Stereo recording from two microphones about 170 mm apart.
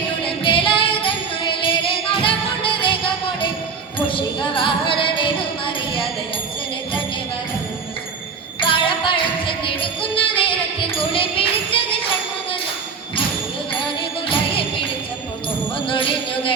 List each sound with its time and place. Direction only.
0.4 s music: 30° left (ahead or behind)
8.6 s jingle bell: 30° left (ahead or behind)
9.6 s music: 30° left (ahead or behind)
14.3 s music: 30° left (ahead or behind)
15.9 s music: 30° left (ahead or behind)